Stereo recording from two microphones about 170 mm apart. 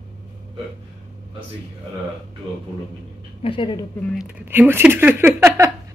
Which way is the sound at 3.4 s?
30° left (ahead or behind).